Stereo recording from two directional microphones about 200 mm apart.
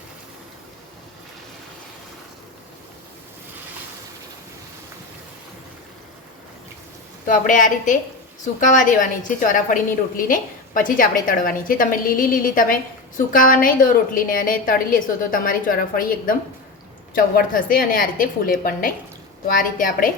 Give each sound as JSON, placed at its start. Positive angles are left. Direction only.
{"t": 7.3, "sound": "a woman's voice", "side_deg": 40}